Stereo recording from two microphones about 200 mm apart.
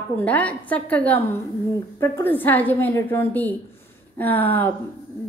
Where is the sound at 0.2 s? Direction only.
5° left (ahead or behind).